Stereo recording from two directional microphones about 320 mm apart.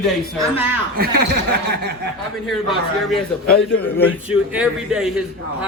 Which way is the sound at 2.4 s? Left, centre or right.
Centre.